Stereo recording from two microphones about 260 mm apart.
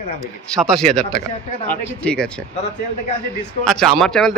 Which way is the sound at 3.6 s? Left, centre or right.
Centre.